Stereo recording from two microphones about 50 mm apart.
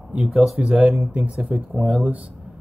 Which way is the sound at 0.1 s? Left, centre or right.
Right.